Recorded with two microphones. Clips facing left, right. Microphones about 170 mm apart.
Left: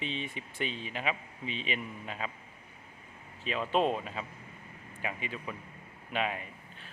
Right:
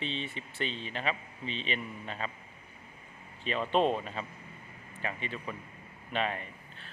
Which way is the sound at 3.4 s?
5° left (ahead or behind).